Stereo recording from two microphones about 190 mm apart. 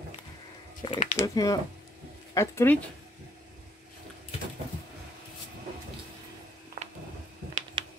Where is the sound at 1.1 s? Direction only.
20° left (ahead or behind).